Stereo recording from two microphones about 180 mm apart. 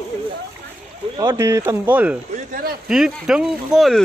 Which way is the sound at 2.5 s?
55° right (ahead or behind).